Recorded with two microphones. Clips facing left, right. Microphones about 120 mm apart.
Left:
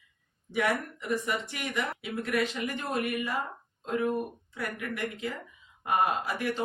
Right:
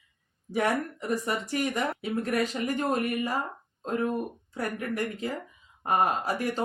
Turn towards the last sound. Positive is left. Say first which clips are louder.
# right 2 dB
turn(degrees=-40)  # may be behind; listen again after turning